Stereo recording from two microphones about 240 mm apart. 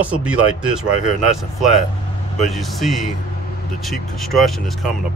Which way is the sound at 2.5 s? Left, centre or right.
Centre.